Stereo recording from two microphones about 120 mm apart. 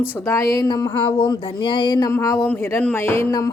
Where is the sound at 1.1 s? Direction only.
40° left (ahead or behind).